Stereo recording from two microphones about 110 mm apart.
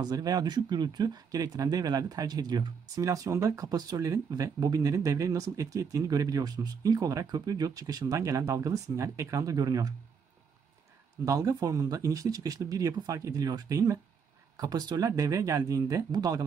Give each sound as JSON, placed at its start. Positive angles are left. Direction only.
{"t": 0.0, "sound": "speech", "side_deg": -35}
{"t": 11.2, "sound": "speech", "side_deg": -30}